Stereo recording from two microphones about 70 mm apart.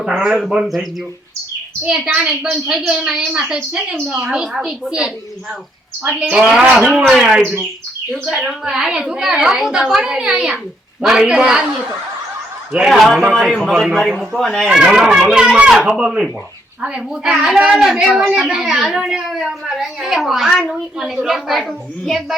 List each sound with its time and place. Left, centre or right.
0.0 s a woman's voice: centre
1.8 s a woman's voice: centre
8.6 s a woman's voice: centre
12.7 s a child's voice: centre
14.7 s a woman's voice: centre
20.7 s a woman's voice: centre
21.2 s a child's voice: centre